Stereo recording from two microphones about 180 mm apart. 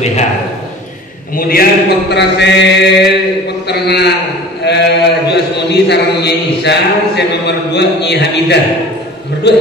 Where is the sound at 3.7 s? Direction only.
65° left (ahead or behind).